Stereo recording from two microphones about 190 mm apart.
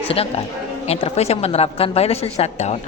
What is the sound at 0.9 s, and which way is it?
Speech, 35° left (ahead or behind).